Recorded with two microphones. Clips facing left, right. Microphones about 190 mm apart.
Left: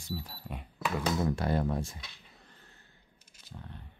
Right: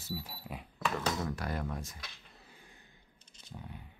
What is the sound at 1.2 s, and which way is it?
Speech, 30° left (ahead or behind).